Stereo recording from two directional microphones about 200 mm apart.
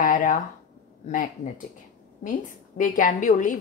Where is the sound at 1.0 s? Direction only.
40° left (ahead or behind).